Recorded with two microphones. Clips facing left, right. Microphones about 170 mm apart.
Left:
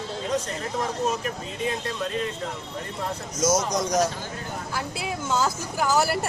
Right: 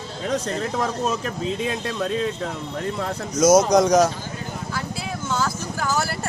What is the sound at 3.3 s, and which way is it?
Speech, 75° right (ahead or behind).